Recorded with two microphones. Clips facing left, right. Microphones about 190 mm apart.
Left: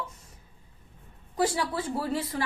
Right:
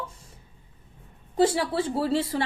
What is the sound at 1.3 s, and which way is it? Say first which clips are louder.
A woman's voice: right 5 dB; 25° right (ahead or behind).